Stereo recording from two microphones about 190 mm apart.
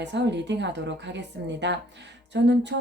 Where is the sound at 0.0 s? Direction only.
65° right (ahead or behind).